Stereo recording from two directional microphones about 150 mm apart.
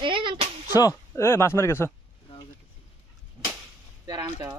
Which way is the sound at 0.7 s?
20° left (ahead or behind).